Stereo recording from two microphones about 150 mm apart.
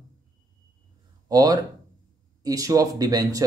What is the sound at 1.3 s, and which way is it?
Speech, 25° right (ahead or behind).